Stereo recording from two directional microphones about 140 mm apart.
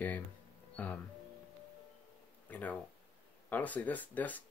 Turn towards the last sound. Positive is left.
turn(degrees=10)  # may be behind; listen again after turning